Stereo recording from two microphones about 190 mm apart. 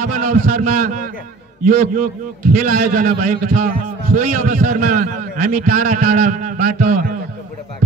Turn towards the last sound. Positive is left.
turn(degrees=-45)  # may be behind; listen again after turning